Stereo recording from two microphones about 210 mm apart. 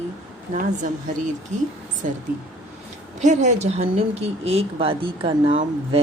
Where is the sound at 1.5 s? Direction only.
35° right (ahead or behind).